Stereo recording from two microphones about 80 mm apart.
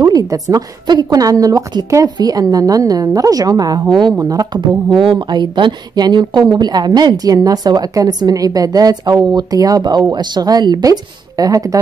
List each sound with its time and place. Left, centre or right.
0.0 s a woman's voice: right